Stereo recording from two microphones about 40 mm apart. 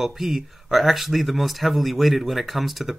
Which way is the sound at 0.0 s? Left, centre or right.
Centre.